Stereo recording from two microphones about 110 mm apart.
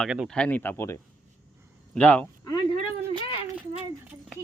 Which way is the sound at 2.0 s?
10° left (ahead or behind).